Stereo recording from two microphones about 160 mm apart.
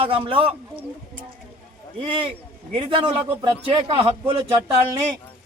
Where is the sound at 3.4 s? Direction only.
35° right (ahead or behind).